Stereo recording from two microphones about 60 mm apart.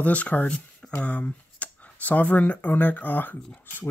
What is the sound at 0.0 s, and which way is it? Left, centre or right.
Speech, left.